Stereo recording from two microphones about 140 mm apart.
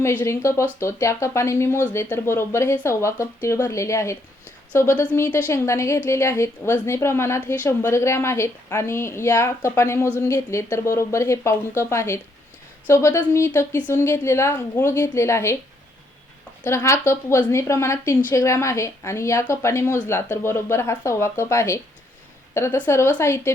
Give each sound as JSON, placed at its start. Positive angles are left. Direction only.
{"t": 0.0, "sound": "speech", "side_deg": 15}
{"t": 16.6, "sound": "speech", "side_deg": 20}